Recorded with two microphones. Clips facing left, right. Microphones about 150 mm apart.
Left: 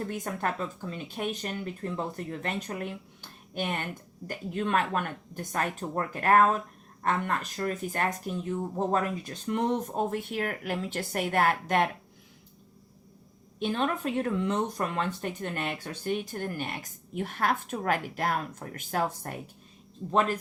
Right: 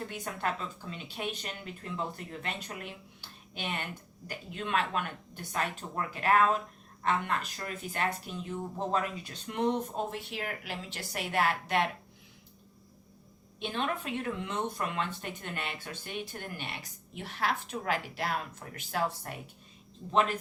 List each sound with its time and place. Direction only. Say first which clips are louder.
0.1 s speech: left 3 dB; 45° left (ahead or behind)
13.6 s speech: left 5 dB; 45° left (ahead or behind)